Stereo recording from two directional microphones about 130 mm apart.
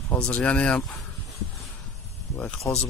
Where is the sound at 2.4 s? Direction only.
5° left (ahead or behind).